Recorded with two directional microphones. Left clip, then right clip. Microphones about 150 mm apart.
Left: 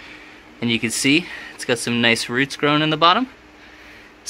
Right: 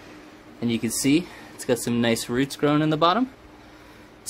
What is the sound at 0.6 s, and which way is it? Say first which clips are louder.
Speech: left 6 dB; centre (ahead or behind).